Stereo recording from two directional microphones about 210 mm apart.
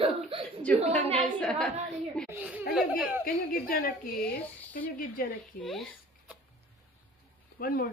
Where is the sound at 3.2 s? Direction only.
45° left (ahead or behind).